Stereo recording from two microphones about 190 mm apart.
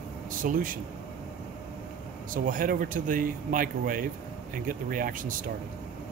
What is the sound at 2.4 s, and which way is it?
A man's voice, 45° right (ahead or behind).